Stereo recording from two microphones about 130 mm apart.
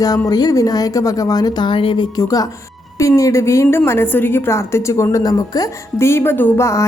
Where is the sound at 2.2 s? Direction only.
30° left (ahead or behind).